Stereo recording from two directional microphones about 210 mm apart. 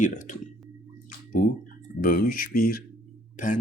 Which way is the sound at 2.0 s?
40° left (ahead or behind).